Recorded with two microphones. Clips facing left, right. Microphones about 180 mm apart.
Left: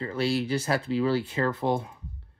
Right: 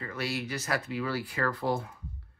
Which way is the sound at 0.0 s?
30° left (ahead or behind).